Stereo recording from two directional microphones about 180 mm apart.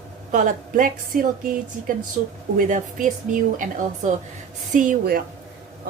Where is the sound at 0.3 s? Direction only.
45° right (ahead or behind).